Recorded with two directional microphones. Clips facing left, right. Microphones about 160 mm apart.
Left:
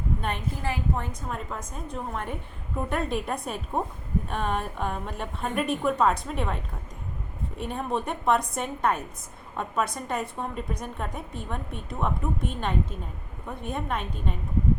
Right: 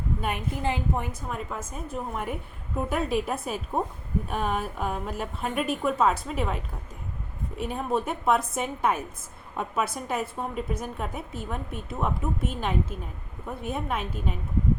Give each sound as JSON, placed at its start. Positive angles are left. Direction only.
{"t": 0.2, "sound": "a woman's voice", "side_deg": -10}
{"t": 1.3, "sound": "a woman's voice", "side_deg": -5}
{"t": 7.6, "sound": "a woman's voice", "side_deg": -5}